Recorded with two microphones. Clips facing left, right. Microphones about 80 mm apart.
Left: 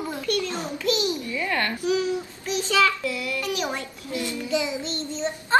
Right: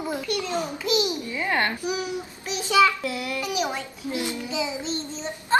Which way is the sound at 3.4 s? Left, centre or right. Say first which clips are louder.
Right 2 dB; centre.